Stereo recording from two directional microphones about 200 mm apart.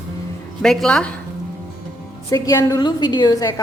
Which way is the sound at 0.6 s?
5° left (ahead or behind).